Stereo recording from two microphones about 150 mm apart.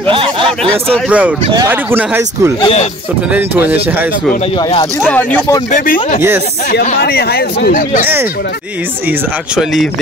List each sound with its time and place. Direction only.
0.1 s a sound: 35° right (ahead or behind)
1.0 s speech: 10° right (ahead or behind)
2.6 s speech: 45° left (ahead or behind)
3.3 s speech: 15° right (ahead or behind)
5.7 s speech: 65° left (ahead or behind)
7.0 s speech: 90° left; by 8.0 s 75° left (ahead or behind)
8.0 s speech: 15° right (ahead or behind)